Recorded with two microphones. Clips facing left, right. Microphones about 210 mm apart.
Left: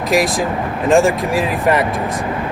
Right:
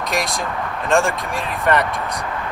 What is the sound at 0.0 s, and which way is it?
Speech, centre (ahead or behind).